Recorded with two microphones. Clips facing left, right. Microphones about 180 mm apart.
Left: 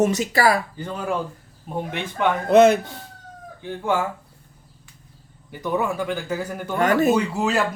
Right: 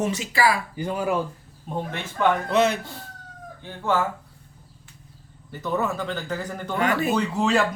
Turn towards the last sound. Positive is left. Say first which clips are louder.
# even
turn(degrees=5)  # may be behind; listen again after turning